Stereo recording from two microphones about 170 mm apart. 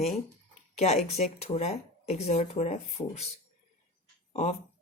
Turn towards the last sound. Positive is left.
turn(degrees=40)  # may be behind; listen again after turning